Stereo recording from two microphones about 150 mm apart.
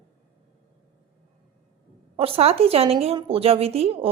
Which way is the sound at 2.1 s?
40° right (ahead or behind).